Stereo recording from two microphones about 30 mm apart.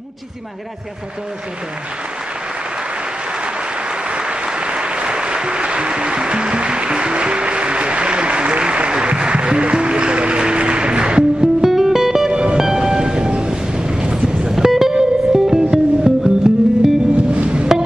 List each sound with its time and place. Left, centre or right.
4.2 s applause: right
4.6 s music: right
11.6 s music: centre
12.3 s music: right
12.7 s music: right
17.3 s music: right